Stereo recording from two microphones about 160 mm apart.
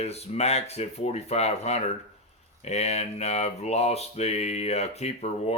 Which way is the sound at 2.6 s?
40° left (ahead or behind).